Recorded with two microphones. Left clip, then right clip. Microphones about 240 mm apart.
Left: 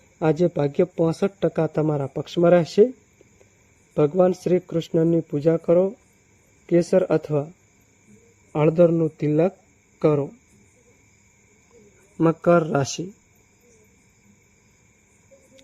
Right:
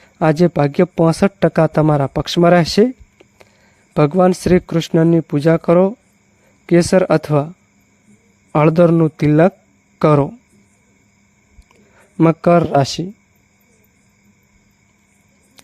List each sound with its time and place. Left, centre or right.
0.2 s a man's voice: right
3.9 s a man's voice: right
8.5 s a man's voice: right
12.1 s a man's voice: right